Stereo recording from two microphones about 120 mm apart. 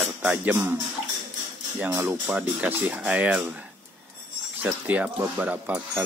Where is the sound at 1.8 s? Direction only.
20° right (ahead or behind).